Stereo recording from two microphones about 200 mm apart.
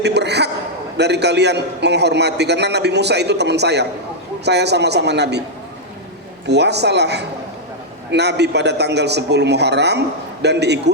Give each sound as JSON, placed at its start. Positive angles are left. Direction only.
{"t": 0.0, "sound": "a man's voice", "side_deg": -55}
{"t": 6.5, "sound": "a man's voice", "side_deg": -55}